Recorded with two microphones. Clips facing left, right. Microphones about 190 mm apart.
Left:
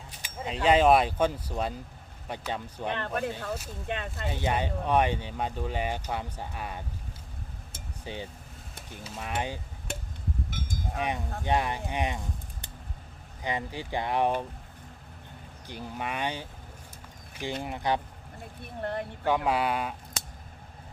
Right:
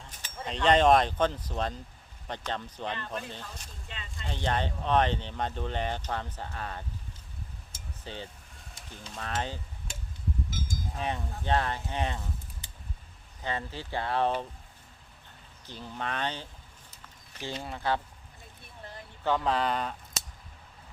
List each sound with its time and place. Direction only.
0.2 s speech: 10° left (ahead or behind)
2.9 s speech: 60° left (ahead or behind)
4.3 s speech: 10° left (ahead or behind)
8.0 s speech: 15° left (ahead or behind)
9.9 s a sound: 60° left (ahead or behind)
11.4 s speech: 15° left (ahead or behind)
13.4 s speech: 15° left (ahead or behind)
15.6 s speech: 15° left (ahead or behind)
17.6 s speech: 15° left (ahead or behind)
18.6 s speech: 60° left (ahead or behind)
19.2 s speech: 10° left (ahead or behind)